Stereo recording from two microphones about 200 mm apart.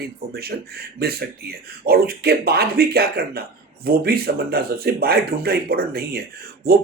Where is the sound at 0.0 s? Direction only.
50° right (ahead or behind).